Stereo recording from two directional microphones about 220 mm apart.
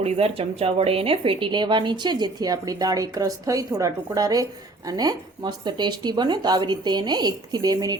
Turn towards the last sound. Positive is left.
turn(degrees=-15)  # may be behind; listen again after turning